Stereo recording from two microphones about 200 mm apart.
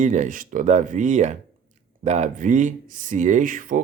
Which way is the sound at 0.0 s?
40° right (ahead or behind).